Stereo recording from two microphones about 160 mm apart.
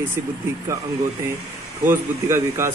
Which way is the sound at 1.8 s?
15° right (ahead or behind).